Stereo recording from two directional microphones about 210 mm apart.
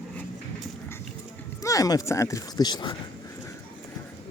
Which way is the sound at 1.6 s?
15° left (ahead or behind).